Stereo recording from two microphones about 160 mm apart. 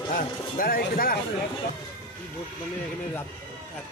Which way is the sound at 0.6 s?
65° left (ahead or behind).